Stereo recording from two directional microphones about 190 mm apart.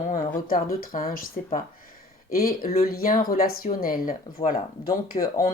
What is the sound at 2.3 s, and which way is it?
Speech, 50° left (ahead or behind).